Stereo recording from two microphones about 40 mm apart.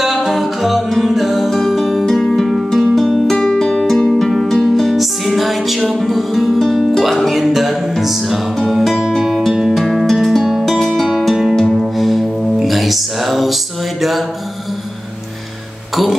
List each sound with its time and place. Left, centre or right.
0.0 s music: centre
9.6 s music: centre